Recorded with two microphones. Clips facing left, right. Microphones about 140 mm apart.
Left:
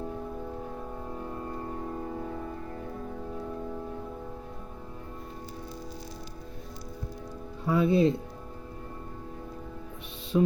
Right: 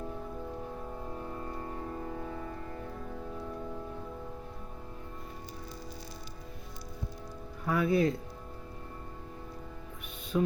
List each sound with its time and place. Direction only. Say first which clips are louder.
7.6 s speech: left 4 dB; 25° left (ahead or behind)
10.3 s music: left 5 dB; 15° left (ahead or behind)